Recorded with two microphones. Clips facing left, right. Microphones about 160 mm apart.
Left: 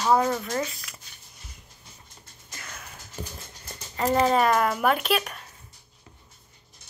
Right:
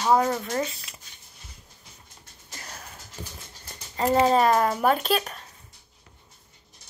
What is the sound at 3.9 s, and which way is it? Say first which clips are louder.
Speech: right 1 dB; 30° right (ahead or behind).